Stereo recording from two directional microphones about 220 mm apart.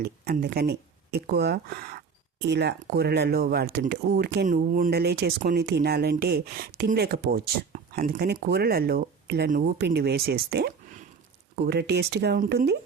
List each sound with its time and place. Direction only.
0.0 s speech: 45° right (ahead or behind)